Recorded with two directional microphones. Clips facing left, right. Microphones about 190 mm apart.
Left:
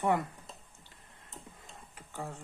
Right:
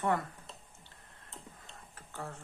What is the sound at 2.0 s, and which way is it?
Tick-tock, 15° left (ahead or behind).